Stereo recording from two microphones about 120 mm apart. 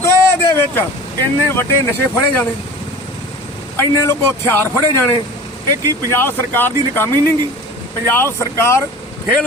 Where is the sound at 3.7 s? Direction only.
25° left (ahead or behind).